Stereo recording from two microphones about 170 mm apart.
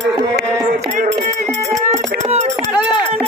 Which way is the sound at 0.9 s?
45° right (ahead or behind).